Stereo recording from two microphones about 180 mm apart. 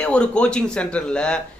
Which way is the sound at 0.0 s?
5° left (ahead or behind).